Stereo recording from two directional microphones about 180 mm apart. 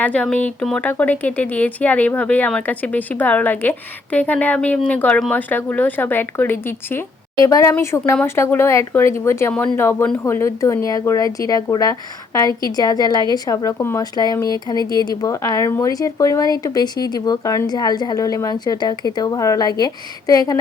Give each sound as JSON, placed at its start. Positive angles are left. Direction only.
{"t": 0.0, "sound": "speech", "side_deg": 5}